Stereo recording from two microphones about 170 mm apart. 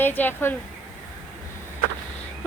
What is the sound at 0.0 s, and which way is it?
Speech, 10° left (ahead or behind).